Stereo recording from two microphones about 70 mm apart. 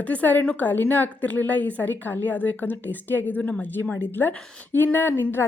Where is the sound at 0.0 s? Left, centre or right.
Left.